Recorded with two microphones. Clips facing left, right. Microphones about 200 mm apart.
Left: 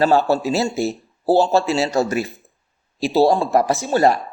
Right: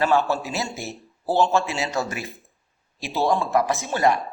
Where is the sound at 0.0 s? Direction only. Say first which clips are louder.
Left 5 dB; 35° left (ahead or behind).